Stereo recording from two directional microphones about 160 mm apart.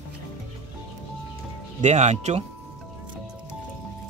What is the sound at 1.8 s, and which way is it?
Speech, 45° right (ahead or behind).